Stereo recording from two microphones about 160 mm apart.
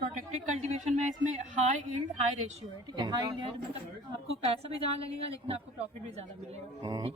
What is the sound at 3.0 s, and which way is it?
Speech, 30° right (ahead or behind).